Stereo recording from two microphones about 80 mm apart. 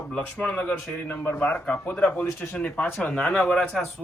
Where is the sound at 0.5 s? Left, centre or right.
Left.